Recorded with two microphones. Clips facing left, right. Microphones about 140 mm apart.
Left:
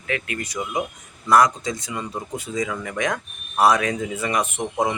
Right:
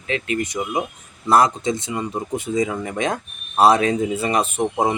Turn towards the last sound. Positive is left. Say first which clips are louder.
# right 3 dB
turn(degrees=-30)  # may be behind; listen again after turning